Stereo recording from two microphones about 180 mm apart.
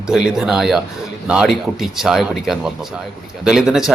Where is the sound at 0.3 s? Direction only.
Centre (ahead or behind).